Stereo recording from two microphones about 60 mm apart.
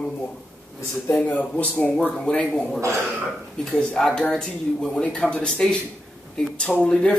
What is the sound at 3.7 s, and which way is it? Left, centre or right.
Speech, centre.